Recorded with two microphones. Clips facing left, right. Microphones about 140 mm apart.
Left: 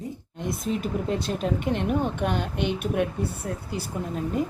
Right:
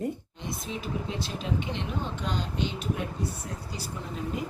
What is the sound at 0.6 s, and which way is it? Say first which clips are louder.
Speech: left 7 dB; 55° left (ahead or behind).